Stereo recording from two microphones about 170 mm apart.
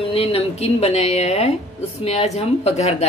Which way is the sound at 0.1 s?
35° left (ahead or behind).